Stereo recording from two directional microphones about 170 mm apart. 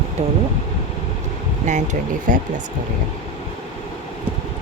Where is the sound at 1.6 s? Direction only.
45° right (ahead or behind).